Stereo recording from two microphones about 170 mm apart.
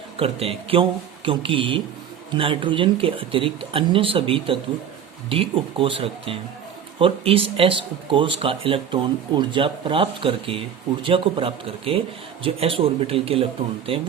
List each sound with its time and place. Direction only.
0.2 s speech: 35° right (ahead or behind)